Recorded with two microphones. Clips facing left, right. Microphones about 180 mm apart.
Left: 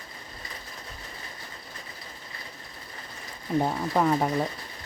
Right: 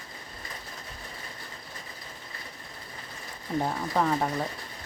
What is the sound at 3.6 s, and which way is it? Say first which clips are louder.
Speech: left 2 dB; 10° left (ahead or behind).